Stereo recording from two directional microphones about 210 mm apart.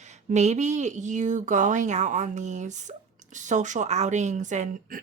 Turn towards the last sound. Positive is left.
turn(degrees=-35)  # may be behind; listen again after turning